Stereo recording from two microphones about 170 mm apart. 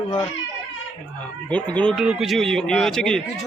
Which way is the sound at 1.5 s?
10° left (ahead or behind).